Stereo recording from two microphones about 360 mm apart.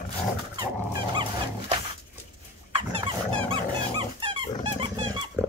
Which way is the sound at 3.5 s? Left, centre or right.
Centre.